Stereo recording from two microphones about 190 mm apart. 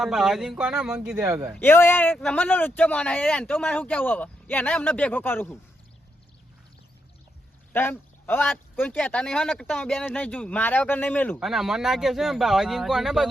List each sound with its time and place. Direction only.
0.0 s speech: centre (ahead or behind)
1.5 s speech: 10° left (ahead or behind)
7.7 s speech: 10° left (ahead or behind)
11.3 s speech: centre (ahead or behind)